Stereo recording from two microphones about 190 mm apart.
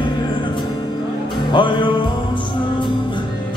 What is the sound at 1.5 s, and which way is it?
Music, 25° left (ahead or behind).